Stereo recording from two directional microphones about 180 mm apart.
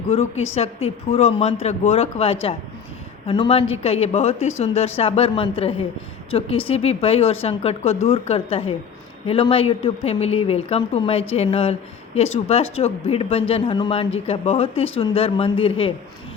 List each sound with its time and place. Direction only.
0.1 s a woman's voice: 35° left (ahead or behind)